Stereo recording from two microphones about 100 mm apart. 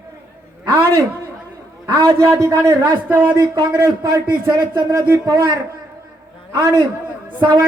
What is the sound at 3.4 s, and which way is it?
A man's voice, 45° right (ahead or behind).